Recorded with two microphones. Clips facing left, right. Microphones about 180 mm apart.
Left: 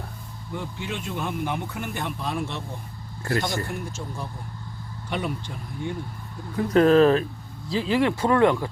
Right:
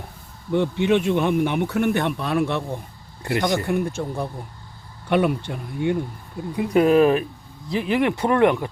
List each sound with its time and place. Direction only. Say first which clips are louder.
0.9 s speech: right 11 dB; 65° right (ahead or behind)
3.2 s speech: right 4 dB; 20° right (ahead or behind)
3.7 s speech: right 10 dB; 60° right (ahead or behind)
6.6 s speech: right 1 dB; 10° right (ahead or behind)